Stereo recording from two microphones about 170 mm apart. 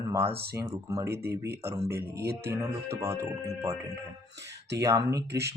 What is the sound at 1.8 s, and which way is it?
Speech, 15° right (ahead or behind).